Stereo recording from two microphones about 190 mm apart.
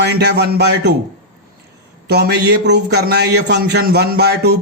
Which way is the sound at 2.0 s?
60° right (ahead or behind).